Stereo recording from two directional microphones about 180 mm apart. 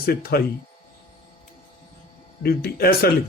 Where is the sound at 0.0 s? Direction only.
60° left (ahead or behind).